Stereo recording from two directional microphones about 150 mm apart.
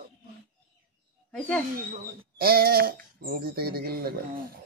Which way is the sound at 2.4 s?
90° right.